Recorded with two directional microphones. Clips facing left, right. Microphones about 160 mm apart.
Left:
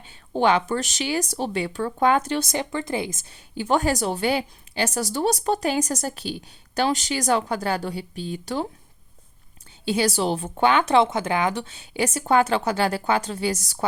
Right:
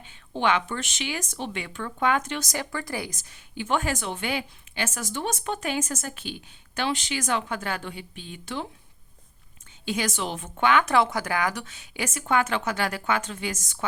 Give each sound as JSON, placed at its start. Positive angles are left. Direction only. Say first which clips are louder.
{"t": 0.0, "sound": "a woman's voice", "louder": "left 5 dB", "side_deg": 35}
{"t": 3.2, "sound": "a woman's voice", "louder": "left 5 dB", "side_deg": 35}
{"t": 9.8, "sound": "a woman's voice", "louder": "left 6 dB", "side_deg": 35}